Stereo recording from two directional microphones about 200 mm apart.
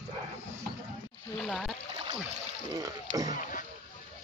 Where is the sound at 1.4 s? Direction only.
Centre (ahead or behind).